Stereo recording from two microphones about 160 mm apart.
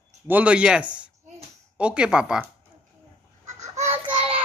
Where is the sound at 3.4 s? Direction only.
45° right (ahead or behind).